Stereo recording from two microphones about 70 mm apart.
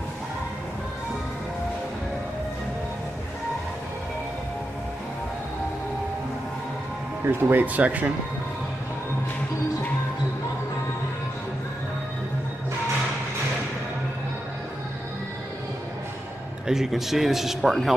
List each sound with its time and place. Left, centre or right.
7.2 s speech: right
16.6 s a man's voice: centre